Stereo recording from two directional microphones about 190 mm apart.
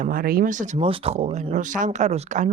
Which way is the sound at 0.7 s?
30° right (ahead or behind).